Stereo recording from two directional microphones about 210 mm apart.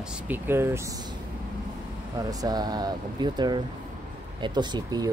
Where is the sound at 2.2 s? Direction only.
15° right (ahead or behind).